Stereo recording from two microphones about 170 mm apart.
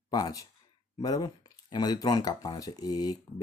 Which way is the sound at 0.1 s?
20° left (ahead or behind).